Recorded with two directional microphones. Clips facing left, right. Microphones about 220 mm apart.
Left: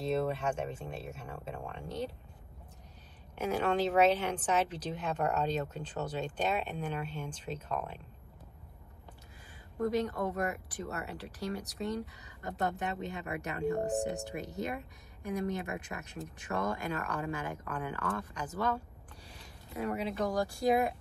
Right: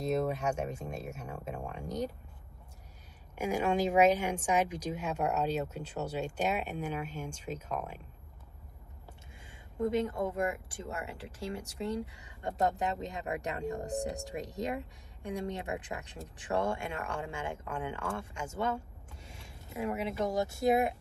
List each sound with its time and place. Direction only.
0.0 s speech: 10° right (ahead or behind)
3.3 s speech: 10° right (ahead or behind)
9.8 s speech: 25° right (ahead or behind)
13.7 s speech: 35° left (ahead or behind)
14.3 s speech: 35° right (ahead or behind)
19.2 s a sound: 25° right (ahead or behind)
20.1 s speech: 25° right (ahead or behind)